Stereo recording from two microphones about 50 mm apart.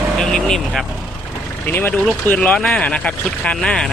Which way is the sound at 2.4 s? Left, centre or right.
Left.